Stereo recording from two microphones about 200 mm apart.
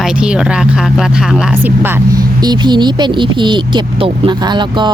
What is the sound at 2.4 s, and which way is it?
Speech, 20° right (ahead or behind).